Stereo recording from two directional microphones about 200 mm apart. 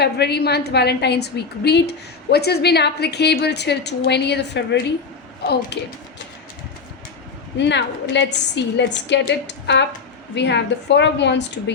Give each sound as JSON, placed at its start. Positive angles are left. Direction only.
{"t": 0.0, "sound": "a woman's voice", "side_deg": 55}
{"t": 7.6, "sound": "a woman's voice", "side_deg": 60}